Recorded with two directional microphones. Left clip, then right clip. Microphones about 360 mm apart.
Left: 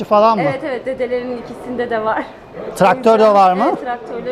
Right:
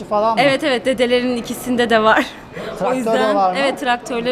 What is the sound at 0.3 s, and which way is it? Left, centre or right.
A woman's voice, right.